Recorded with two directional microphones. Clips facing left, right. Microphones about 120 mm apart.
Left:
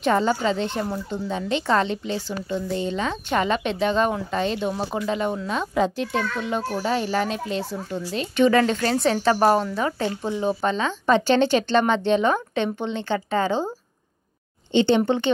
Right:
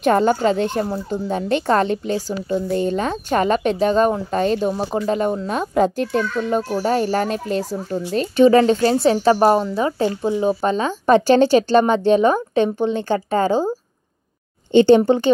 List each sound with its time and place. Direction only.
0.0 s a woman's voice: 50° right (ahead or behind); by 9.9 s 25° right (ahead or behind)
10.4 s a woman's voice: 40° right (ahead or behind)
14.7 s a woman's voice: 45° right (ahead or behind)